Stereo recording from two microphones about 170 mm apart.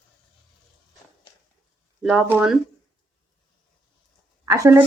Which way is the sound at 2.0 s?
5° right (ahead or behind).